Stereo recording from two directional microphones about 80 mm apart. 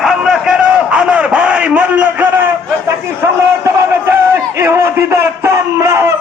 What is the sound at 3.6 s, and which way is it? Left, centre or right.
Crowd, right.